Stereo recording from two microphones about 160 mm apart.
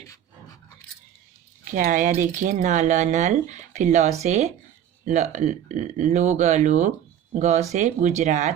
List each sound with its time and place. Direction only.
1.7 s speech: 55° right (ahead or behind)